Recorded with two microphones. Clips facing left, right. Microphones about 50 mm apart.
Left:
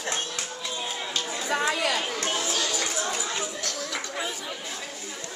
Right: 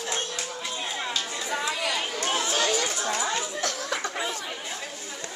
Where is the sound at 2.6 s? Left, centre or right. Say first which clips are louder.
Right 4 dB; right.